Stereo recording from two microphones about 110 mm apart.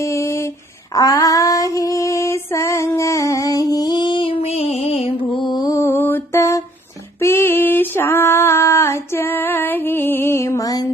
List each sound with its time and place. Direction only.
0.0 s a sound: 25° left (ahead or behind)
0.9 s female singing: 30° left (ahead or behind); by 5.1 s 70° left (ahead or behind)
5.4 s mantra: 40° left (ahead or behind)
7.2 s female singing: 25° left (ahead or behind)